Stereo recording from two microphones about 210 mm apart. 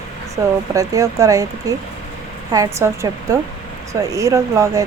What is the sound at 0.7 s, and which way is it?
A woman's voice, 15° right (ahead or behind).